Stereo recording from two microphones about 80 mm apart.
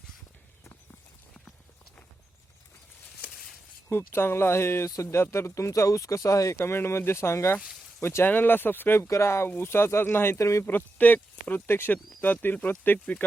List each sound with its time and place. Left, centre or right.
3.8 s speech: left
6.6 s speech: left
7.6 s a sound: centre
8.0 s speech: left
10.7 s speech: left